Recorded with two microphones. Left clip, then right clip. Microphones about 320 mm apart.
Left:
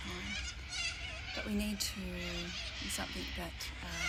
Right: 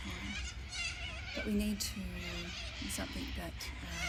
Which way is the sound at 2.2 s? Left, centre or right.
Right.